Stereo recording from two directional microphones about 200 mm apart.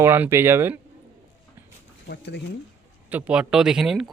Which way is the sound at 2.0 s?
55° left (ahead or behind).